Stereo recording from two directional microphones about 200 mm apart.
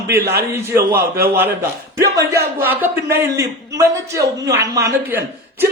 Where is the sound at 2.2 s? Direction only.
55° right (ahead or behind).